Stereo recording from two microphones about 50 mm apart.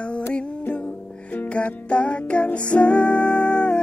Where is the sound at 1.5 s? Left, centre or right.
Left.